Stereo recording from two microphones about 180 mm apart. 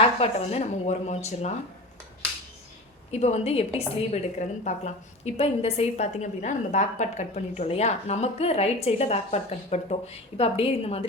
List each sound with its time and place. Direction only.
0.0 s a woman's voice: 35° left (ahead or behind)
3.1 s a woman's voice: 35° left (ahead or behind)